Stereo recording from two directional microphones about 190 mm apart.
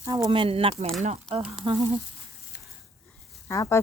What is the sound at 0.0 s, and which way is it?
Speech, 20° right (ahead or behind).